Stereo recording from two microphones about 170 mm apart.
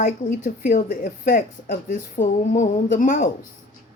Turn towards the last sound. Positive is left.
turn(degrees=50)  # may be behind; listen again after turning